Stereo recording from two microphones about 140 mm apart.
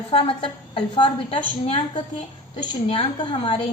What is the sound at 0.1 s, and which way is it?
A woman's voice, 40° left (ahead or behind).